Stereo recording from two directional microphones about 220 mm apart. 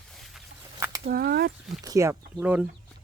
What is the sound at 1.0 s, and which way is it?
Speech, 45° right (ahead or behind).